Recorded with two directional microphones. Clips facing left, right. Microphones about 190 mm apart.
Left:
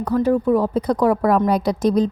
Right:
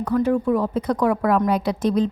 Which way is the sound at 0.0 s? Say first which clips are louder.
Left 2 dB; 35° left (ahead or behind).